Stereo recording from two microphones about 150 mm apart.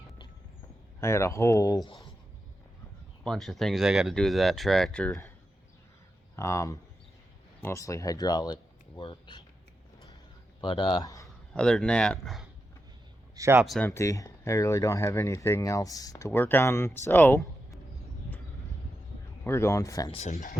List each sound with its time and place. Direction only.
0.9 s speech: 20° left (ahead or behind)
3.2 s speech: centre (ahead or behind)
6.3 s speech: 20° left (ahead or behind)
10.6 s speech: 30° left (ahead or behind)
11.5 s speech: 5° left (ahead or behind)
13.3 s speech: 20° right (ahead or behind)
13.7 s speech: 15° left (ahead or behind)
19.5 s speech: 15° left (ahead or behind)
20.1 s speech: 50° left (ahead or behind)